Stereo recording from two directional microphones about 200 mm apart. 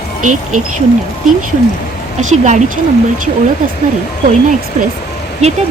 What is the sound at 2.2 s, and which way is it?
Speech, 35° right (ahead or behind).